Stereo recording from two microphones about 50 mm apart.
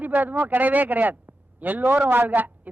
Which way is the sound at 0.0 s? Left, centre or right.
Right.